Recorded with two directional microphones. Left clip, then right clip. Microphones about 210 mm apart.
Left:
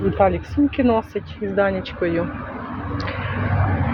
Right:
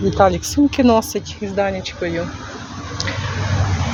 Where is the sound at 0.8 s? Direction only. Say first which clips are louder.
Right 5 dB; 45° right (ahead or behind).